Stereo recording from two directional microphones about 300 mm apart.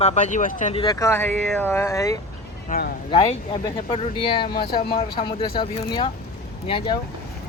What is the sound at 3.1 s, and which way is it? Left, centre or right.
Speech, centre.